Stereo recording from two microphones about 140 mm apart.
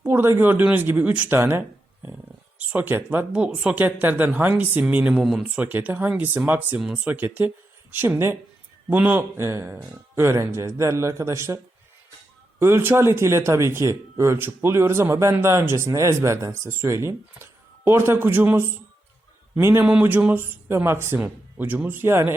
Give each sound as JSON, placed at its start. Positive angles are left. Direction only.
{"t": 0.0, "sound": "speech", "side_deg": -15}